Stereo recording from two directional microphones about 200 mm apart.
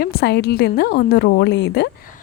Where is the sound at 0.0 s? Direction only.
50° left (ahead or behind).